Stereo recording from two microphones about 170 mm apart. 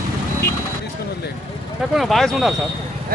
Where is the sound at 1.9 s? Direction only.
Centre (ahead or behind).